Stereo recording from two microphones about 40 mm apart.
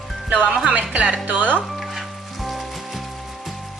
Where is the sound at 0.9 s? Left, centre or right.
Right.